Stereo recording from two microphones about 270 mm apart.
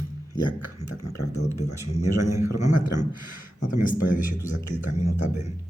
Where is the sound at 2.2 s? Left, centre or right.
Centre.